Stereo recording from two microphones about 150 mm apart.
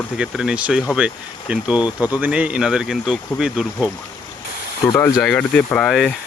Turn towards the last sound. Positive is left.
turn(degrees=5)  # may be behind; listen again after turning